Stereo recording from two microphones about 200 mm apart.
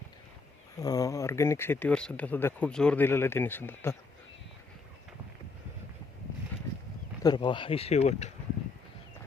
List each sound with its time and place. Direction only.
0.8 s speech: 15° left (ahead or behind)
7.2 s speech: 20° left (ahead or behind)